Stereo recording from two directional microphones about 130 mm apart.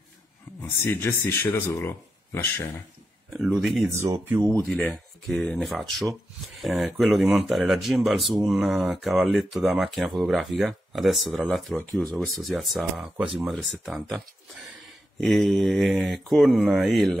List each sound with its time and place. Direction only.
0.6 s speech: 20° left (ahead or behind)
3.3 s speech: centre (ahead or behind)
4.0 s speech: 20° right (ahead or behind)
4.6 s speech: 5° left (ahead or behind)